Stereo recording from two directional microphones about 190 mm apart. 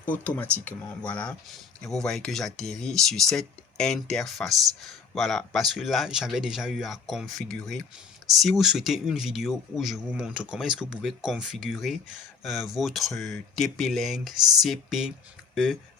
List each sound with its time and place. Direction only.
0.0 s speech: 10° left (ahead or behind)